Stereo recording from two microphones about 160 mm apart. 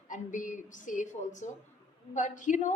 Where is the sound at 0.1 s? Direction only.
55° left (ahead or behind).